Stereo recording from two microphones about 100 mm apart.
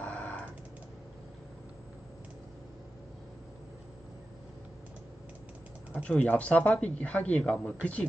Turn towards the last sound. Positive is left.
turn(degrees=10)  # may be behind; listen again after turning